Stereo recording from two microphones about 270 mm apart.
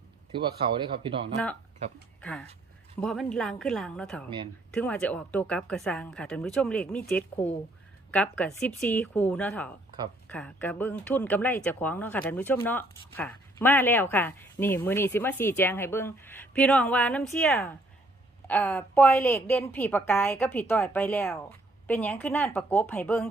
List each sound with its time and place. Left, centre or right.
0.3 s speech: centre
3.0 s speech: centre